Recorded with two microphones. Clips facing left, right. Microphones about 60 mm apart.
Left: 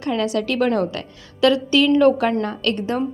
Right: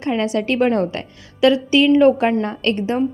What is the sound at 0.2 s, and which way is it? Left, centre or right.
A woman's voice, right.